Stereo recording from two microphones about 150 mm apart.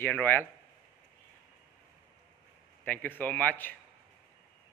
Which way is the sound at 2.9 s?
10° left (ahead or behind).